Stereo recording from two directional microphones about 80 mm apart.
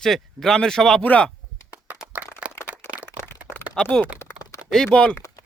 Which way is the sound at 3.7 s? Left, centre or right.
Centre.